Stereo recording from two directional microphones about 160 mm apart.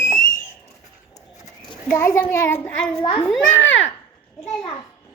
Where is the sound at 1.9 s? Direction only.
20° left (ahead or behind).